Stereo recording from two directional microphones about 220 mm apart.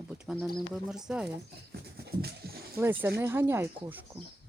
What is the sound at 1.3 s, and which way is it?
Speech, 45° right (ahead or behind).